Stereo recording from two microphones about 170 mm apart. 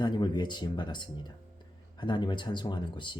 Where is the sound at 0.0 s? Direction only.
25° left (ahead or behind).